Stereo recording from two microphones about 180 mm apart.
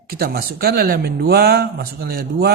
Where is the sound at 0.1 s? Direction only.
60° right (ahead or behind).